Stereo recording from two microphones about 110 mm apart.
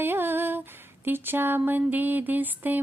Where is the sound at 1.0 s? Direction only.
20° right (ahead or behind).